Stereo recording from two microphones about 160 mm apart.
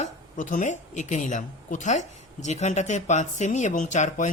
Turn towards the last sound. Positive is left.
turn(degrees=50)  # may be behind; listen again after turning